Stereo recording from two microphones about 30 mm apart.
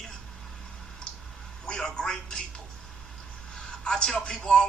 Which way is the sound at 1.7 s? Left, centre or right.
Left.